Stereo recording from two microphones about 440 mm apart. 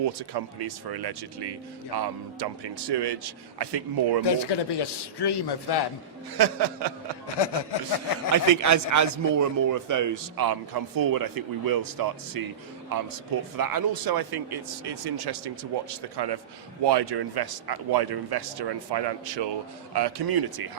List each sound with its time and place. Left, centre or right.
0.0 s a man's voice: right
4.2 s a man's voice: left
6.3 s a sound: right
7.3 s a man's voice: left
8.6 s a man's voice: right